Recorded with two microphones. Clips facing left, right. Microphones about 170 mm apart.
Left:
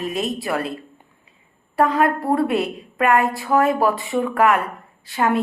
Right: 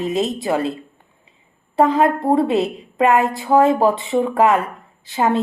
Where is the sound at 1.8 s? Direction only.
20° right (ahead or behind).